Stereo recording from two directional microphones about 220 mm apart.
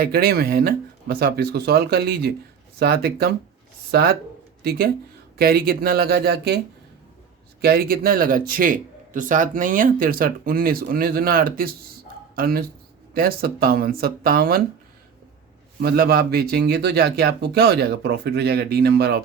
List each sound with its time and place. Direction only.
0.0 s speech: 45° right (ahead or behind)
5.4 s speech: 45° right (ahead or behind)
7.6 s a man's voice: 45° right (ahead or behind)
15.8 s speech: 45° right (ahead or behind)